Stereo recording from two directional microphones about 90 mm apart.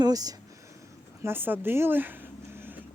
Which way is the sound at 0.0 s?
45° right (ahead or behind).